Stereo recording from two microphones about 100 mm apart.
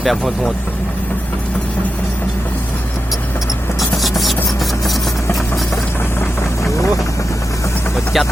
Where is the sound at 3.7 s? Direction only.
Centre (ahead or behind).